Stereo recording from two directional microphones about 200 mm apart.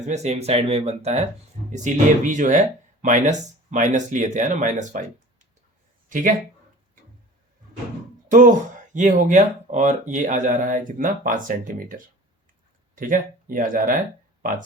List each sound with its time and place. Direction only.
0.0 s speech: 35° right (ahead or behind)
8.3 s speech: 40° right (ahead or behind)